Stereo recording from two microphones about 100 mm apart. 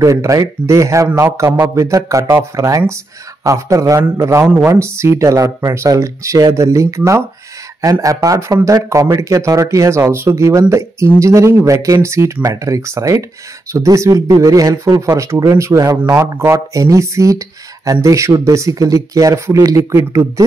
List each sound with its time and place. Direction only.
0.0 s speech: 35° right (ahead or behind)